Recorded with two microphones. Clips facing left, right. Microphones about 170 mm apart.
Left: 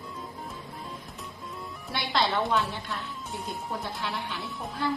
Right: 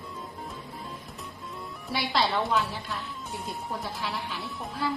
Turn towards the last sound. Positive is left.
turn(degrees=0)  # may be behind; listen again after turning